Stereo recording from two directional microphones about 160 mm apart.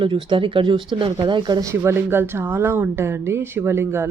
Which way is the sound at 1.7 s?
15° right (ahead or behind).